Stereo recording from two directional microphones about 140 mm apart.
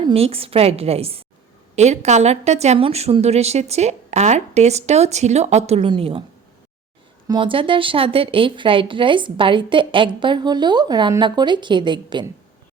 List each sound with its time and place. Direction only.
0.0 s speech: 45° right (ahead or behind)
7.3 s speech: 35° right (ahead or behind)